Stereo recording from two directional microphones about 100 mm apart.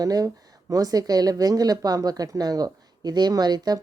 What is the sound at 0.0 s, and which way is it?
Speech, 40° right (ahead or behind).